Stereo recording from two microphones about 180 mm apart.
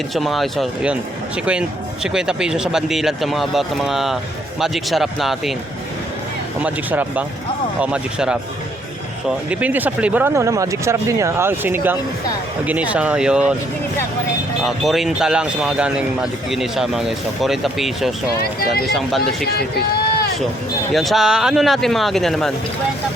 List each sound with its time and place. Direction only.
0.1 s speech: centre (ahead or behind)
2.1 s speech: 5° right (ahead or behind)
6.6 s speech: 10° right (ahead or behind)
9.5 s speech: 10° right (ahead or behind)
14.6 s speech: centre (ahead or behind)
19.5 s speech: 60° left (ahead or behind)
20.9 s speech: centre (ahead or behind)